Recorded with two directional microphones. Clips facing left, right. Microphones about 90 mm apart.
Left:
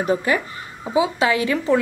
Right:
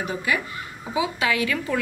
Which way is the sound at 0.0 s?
35° left (ahead or behind).